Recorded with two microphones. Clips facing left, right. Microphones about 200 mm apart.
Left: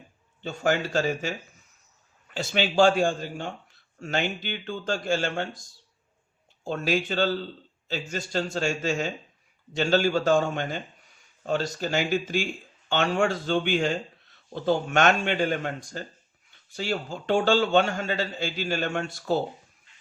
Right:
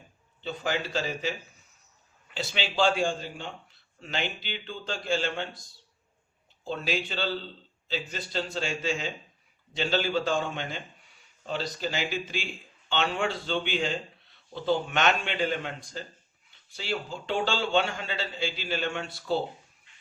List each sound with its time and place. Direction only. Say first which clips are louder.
0.4 s a man's voice: left 5 dB; 50° left (ahead or behind)
6.7 s a man's voice: left 5 dB; 45° left (ahead or behind)